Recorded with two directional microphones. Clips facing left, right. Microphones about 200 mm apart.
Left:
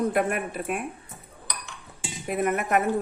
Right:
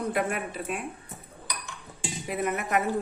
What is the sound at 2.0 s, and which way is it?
Dishes, centre (ahead or behind).